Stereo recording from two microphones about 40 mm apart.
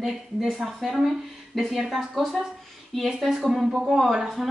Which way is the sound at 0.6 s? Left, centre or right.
Centre.